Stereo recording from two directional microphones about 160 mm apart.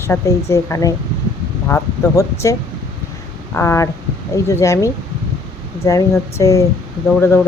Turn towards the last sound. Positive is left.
turn(degrees=15)  # may be behind; listen again after turning